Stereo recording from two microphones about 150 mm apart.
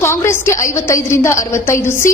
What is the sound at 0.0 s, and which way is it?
A woman's voice, 15° left (ahead or behind).